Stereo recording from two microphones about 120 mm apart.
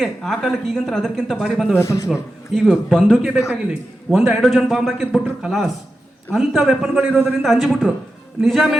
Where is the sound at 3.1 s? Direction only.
5° right (ahead or behind).